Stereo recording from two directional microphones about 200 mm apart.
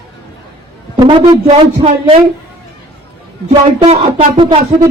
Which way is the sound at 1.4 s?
30° right (ahead or behind).